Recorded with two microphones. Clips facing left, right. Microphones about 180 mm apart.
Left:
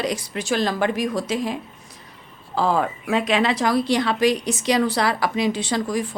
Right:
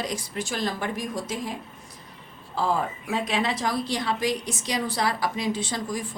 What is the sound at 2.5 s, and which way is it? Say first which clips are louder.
A woman's voice: left 5 dB; 85° left.